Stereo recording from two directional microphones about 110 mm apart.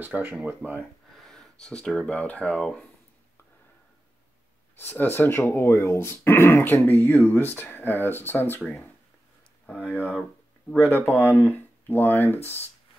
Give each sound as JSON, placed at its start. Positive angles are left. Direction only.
{"t": 0.0, "sound": "speech", "side_deg": -15}
{"t": 1.1, "sound": "speech", "side_deg": 5}
{"t": 4.7, "sound": "speech", "side_deg": 20}
{"t": 8.5, "sound": "speech", "side_deg": 5}
{"t": 9.7, "sound": "speech", "side_deg": 15}